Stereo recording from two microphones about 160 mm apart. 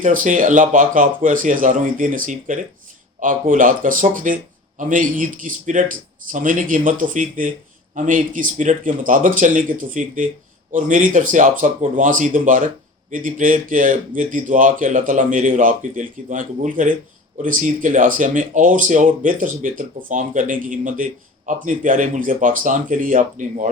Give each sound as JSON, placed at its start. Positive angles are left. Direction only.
{"t": 0.0, "sound": "speech", "side_deg": -55}